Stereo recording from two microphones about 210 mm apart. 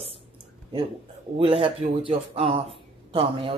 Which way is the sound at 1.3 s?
25° right (ahead or behind).